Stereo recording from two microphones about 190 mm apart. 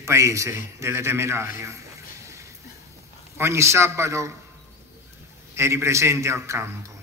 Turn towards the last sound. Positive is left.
turn(degrees=-15)  # may be behind; listen again after turning